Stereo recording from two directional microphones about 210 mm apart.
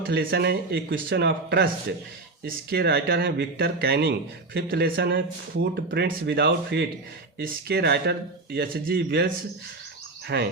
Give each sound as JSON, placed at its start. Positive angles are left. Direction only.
{"t": 0.1, "sound": "speech", "side_deg": -50}
{"t": 10.3, "sound": "speech", "side_deg": -55}